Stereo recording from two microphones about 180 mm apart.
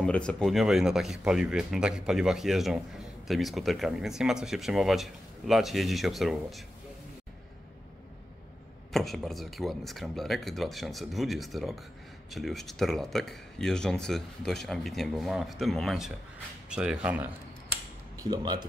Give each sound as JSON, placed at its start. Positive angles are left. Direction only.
{"t": 0.0, "sound": "speech", "side_deg": 5}
{"t": 8.9, "sound": "speech", "side_deg": 0}
{"t": 18.2, "sound": "speech", "side_deg": -20}